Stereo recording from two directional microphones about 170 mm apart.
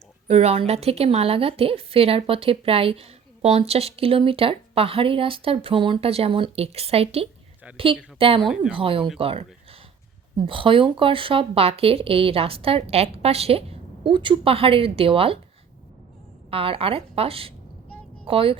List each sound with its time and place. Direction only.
0.3 s a woman's voice: 40° right (ahead or behind)
10.4 s a woman's voice: 30° right (ahead or behind)
16.5 s a woman's voice: 35° right (ahead or behind)